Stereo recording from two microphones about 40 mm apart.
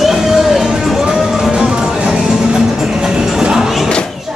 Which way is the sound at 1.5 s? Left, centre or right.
Right.